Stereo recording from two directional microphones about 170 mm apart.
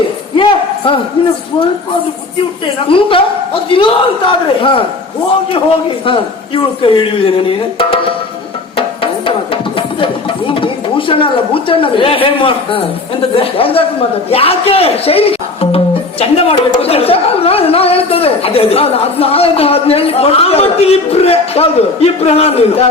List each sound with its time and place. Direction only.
2.9 s speech: 30° left (ahead or behind)
6.1 s speech: 30° left (ahead or behind)
10.5 s a woman's voice: 30° left (ahead or behind)